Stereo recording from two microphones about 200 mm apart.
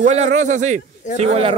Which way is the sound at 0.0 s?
35° right (ahead or behind).